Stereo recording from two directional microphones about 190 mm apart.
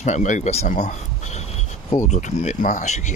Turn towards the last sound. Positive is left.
turn(degrees=40)  # may be behind; listen again after turning